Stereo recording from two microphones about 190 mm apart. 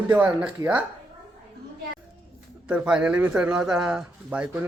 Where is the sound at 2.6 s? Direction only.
5° right (ahead or behind).